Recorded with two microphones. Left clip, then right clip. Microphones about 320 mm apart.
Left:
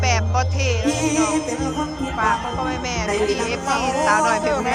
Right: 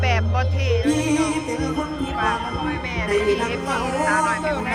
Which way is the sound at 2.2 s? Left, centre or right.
Centre.